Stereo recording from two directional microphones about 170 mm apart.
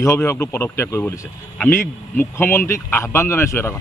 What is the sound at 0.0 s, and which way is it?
Speech, 15° left (ahead or behind).